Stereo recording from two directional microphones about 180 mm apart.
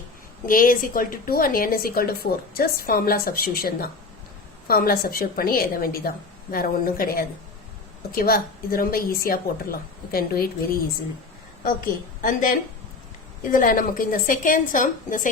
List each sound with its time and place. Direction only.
0.4 s a woman's voice: 50° left (ahead or behind)
12.2 s a woman's voice: 50° left (ahead or behind)